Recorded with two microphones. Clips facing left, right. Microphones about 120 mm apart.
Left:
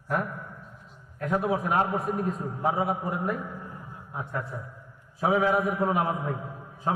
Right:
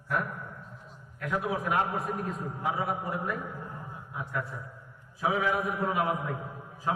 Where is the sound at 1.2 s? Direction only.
30° left (ahead or behind).